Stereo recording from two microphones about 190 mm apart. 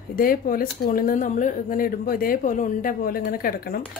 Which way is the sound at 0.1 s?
50° left (ahead or behind).